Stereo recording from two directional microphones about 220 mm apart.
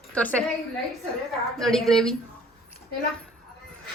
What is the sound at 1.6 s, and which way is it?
Speech, centre (ahead or behind).